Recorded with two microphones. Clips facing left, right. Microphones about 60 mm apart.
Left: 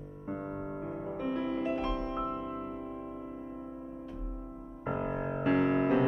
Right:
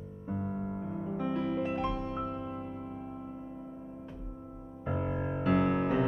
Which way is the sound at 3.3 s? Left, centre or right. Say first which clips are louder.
Left 1 dB; centre.